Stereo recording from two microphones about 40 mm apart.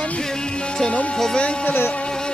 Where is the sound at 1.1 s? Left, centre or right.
Centre.